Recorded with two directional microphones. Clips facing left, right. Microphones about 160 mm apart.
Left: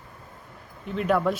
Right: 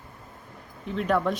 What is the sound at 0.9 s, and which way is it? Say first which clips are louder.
Speech: left 1 dB; centre (ahead or behind).